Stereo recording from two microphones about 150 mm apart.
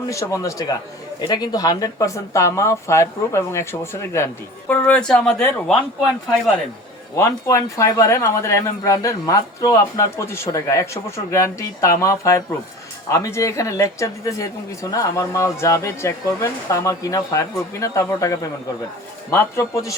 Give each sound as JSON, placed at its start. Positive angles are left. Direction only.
{"t": 0.1, "sound": "speech", "side_deg": 20}
{"t": 4.7, "sound": "speech", "side_deg": 5}
{"t": 7.2, "sound": "speech", "side_deg": 20}